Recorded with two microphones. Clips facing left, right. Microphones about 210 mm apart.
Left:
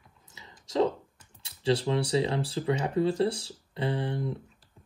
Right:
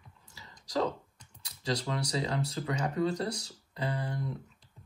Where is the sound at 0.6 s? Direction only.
25° left (ahead or behind).